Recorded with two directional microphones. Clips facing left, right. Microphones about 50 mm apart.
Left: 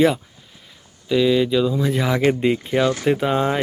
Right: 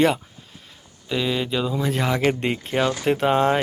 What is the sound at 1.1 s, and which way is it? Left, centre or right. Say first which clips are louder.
Speech: left 7 dB; centre.